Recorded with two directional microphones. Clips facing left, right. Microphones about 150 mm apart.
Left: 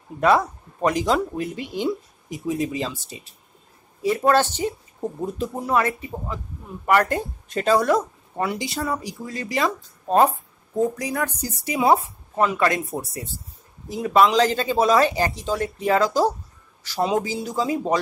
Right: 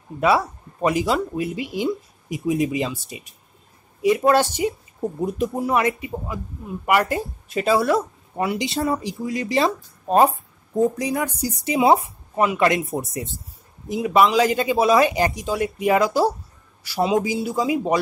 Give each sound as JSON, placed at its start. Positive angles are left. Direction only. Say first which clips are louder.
{"t": 0.2, "sound": "speech", "louder": "left 1 dB", "side_deg": -5}
{"t": 8.5, "sound": "speech", "louder": "right 4 dB", "side_deg": -25}
{"t": 9.2, "sound": "speech", "louder": "right 4 dB", "side_deg": -15}
{"t": 14.0, "sound": "speech", "louder": "even", "side_deg": -10}